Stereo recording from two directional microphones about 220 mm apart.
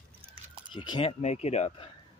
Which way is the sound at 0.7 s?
20° left (ahead or behind).